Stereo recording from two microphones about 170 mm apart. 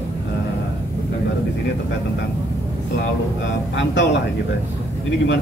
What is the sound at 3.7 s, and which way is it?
Speech, 90° left.